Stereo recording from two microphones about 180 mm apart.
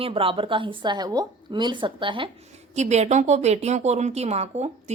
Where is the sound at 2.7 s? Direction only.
40° right (ahead or behind).